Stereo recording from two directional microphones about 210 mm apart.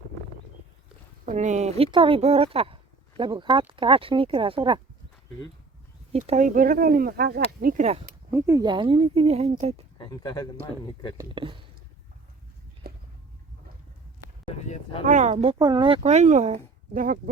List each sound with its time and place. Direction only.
1.2 s speech: 35° right (ahead or behind)
6.1 s speech: 35° right (ahead or behind)
8.3 s speech: 15° right (ahead or behind); by 9.8 s 30° right (ahead or behind)
10.0 s speech: 20° left (ahead or behind)
11.2 s speech: 25° right (ahead or behind)
12.8 s a sound: 45° right (ahead or behind)
14.4 s a sound: 25° left (ahead or behind)
15.0 s speech: 35° right (ahead or behind)
15.3 s speech: 25° right (ahead or behind)